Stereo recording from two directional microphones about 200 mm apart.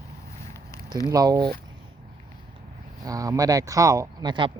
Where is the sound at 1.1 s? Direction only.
15° right (ahead or behind).